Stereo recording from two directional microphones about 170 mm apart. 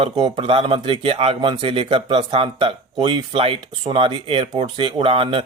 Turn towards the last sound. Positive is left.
turn(degrees=-30)  # may be behind; listen again after turning